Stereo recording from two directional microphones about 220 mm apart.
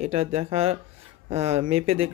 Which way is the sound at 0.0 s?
30° right (ahead or behind).